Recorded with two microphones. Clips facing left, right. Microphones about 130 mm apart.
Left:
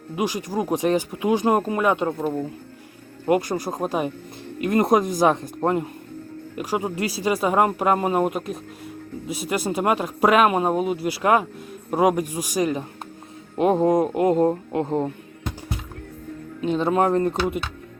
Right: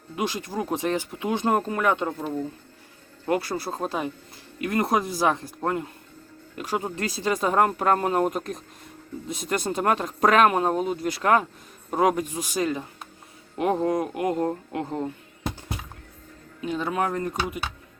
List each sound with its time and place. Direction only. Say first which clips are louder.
0.2 s speech: left 4 dB; 15° left (ahead or behind)
3.2 s a man's voice: left 4 dB; 15° left (ahead or behind)
6.6 s a man's voice: left 3 dB; 15° left (ahead or behind)
16.6 s a man's voice: left 6 dB; 25° left (ahead or behind)